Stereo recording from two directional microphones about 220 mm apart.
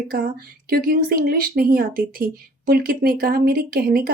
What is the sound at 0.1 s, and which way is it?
A woman's voice, 40° right (ahead or behind).